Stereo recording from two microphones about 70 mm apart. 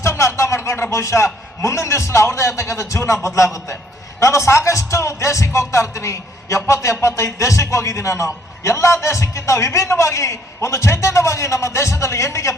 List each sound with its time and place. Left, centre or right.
0.0 s a man's voice: left